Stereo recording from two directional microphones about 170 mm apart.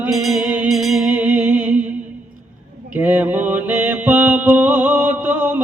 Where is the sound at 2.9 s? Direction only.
10° right (ahead or behind).